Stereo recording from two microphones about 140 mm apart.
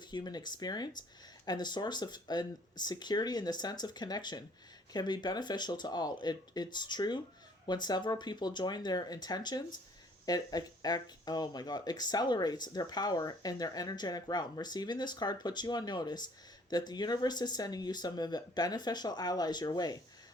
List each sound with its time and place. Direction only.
0.1 s speech: 30° left (ahead or behind)